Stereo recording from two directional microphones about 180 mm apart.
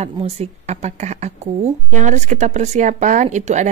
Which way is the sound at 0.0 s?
35° right (ahead or behind).